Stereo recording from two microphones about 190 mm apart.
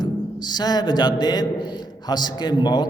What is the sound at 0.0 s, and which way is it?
A man's voice, 20° left (ahead or behind).